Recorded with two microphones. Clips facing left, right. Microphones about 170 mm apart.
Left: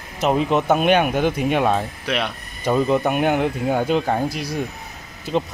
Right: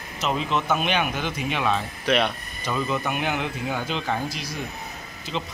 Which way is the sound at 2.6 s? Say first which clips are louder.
Left 8 dB; 40° left (ahead or behind).